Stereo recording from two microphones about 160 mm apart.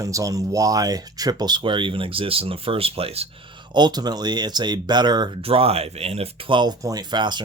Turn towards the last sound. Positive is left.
turn(degrees=-30)  # may be behind; listen again after turning